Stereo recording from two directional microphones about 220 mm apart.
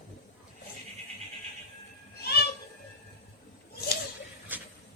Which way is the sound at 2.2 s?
45° left (ahead or behind).